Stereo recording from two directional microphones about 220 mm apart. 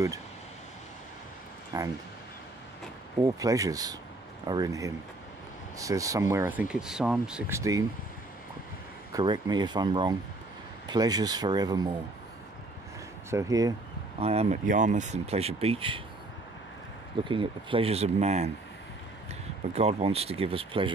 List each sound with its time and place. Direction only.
1.7 s speech: 15° right (ahead or behind)
3.2 s speech: 15° right (ahead or behind)
9.1 s speech: 20° right (ahead or behind)
13.3 s speech: 15° right (ahead or behind)
14.2 s speech: 30° right (ahead or behind)
17.2 s speech: 20° right (ahead or behind)
19.7 s speech: 30° right (ahead or behind)